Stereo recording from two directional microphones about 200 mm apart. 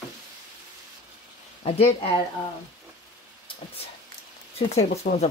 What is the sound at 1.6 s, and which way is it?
Speech, 30° left (ahead or behind).